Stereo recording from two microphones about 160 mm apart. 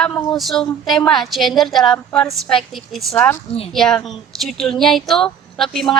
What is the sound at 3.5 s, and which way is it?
Speech, 35° left (ahead or behind).